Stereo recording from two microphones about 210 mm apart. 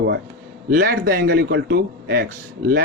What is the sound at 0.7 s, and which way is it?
Speech, 45° right (ahead or behind).